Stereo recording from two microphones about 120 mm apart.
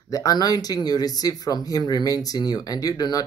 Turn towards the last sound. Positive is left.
turn(degrees=30)  # may be behind; listen again after turning